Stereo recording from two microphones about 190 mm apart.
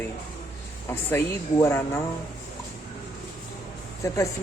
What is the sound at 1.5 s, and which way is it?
Speech, 15° left (ahead or behind).